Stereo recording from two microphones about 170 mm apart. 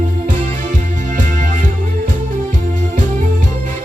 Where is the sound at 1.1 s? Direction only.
45° right (ahead or behind).